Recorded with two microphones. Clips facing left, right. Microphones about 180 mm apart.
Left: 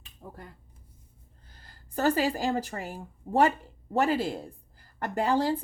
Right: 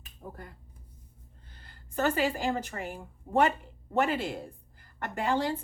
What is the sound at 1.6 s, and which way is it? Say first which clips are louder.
Speech: left 3 dB; 35° left (ahead or behind).